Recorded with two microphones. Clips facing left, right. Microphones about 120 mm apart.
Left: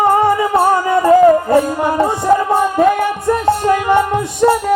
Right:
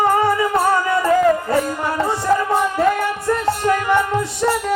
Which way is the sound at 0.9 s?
30° left (ahead or behind).